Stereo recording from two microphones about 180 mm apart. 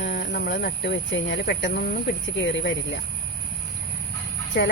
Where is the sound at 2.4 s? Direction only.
85° left.